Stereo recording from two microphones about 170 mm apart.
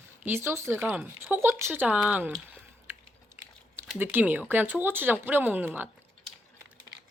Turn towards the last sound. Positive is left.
turn(degrees=-10)  # may be behind; listen again after turning